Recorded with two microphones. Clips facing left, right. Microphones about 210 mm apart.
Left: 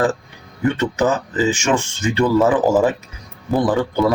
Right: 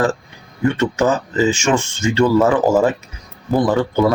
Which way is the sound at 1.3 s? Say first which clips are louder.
Right 2 dB; 15° left (ahead or behind).